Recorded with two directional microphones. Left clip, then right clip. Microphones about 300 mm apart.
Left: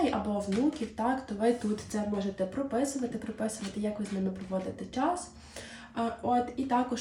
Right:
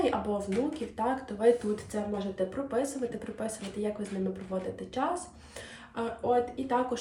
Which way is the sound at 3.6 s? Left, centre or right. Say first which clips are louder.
Right 1 dB; centre.